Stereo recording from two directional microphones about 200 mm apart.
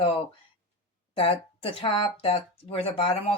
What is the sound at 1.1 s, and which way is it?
Speech, 25° left (ahead or behind).